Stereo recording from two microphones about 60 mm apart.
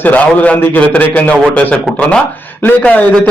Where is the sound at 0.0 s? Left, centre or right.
Left.